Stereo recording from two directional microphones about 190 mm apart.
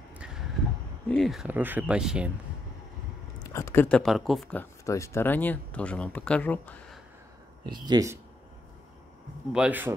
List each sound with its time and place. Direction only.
1.0 s speech: 5° left (ahead or behind)
3.4 s speech: 15° left (ahead or behind)
7.6 s speech: 25° right (ahead or behind)
9.5 s speech: 5° right (ahead or behind)